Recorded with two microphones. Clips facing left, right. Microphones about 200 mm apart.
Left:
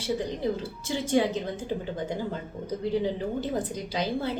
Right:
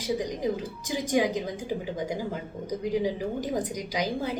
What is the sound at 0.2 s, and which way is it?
A woman's voice, 15° right (ahead or behind).